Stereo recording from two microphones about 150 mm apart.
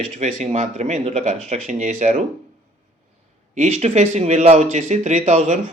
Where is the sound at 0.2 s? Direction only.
50° right (ahead or behind).